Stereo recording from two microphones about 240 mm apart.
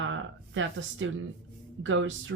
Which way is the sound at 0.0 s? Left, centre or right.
Right.